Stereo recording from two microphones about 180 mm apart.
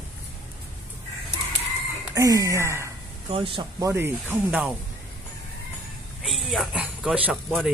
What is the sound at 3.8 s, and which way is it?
Speech, 15° right (ahead or behind).